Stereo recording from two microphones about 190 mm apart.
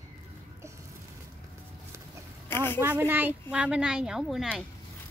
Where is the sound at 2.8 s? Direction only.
10° right (ahead or behind).